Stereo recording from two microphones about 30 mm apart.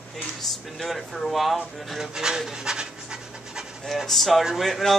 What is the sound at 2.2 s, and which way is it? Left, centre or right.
Speech, right.